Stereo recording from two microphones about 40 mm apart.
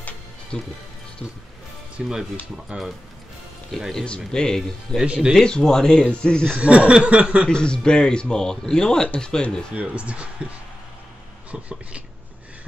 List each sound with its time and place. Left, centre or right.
0.5 s speech: left
2.0 s speech: centre
2.7 s speech: right
4.3 s speech: centre
5.0 s chuckle: right
5.3 s speech: left
6.6 s chuckle: right
7.4 s speech: left
9.8 s chuckle: right
11.5 s speech: right